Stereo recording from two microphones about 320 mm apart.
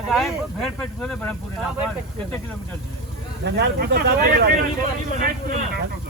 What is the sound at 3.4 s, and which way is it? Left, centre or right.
Speech, right.